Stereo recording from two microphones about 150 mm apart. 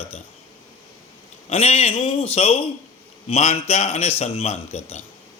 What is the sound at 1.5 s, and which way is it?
Speech, 45° left (ahead or behind).